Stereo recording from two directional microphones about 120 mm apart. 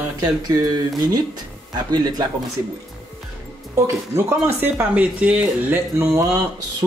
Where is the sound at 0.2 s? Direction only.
30° right (ahead or behind).